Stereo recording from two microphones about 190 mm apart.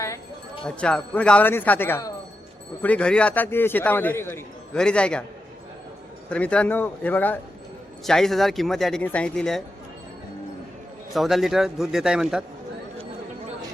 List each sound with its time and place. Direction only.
0.6 s a man's voice: 5° left (ahead or behind)
6.3 s a man's voice: 5° left (ahead or behind)
11.1 s speech: centre (ahead or behind)